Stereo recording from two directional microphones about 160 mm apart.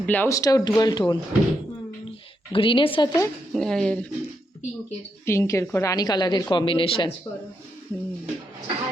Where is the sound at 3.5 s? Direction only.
5° left (ahead or behind).